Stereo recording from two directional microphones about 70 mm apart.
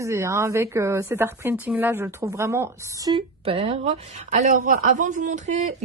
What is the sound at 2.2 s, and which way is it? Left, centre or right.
Speech, right.